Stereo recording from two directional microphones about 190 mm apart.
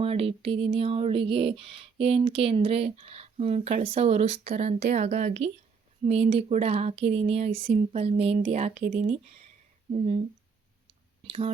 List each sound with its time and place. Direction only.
0.0 s music: 30° right (ahead or behind)
11.3 s speech: 30° right (ahead or behind)